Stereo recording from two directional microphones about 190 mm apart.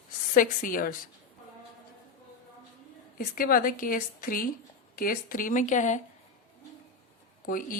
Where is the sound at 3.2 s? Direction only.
50° left (ahead or behind).